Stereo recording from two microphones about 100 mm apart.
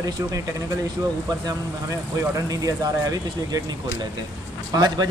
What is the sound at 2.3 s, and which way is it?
Speech, 35° right (ahead or behind).